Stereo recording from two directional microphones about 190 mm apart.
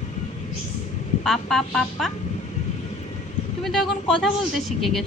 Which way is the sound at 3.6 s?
Centre (ahead or behind).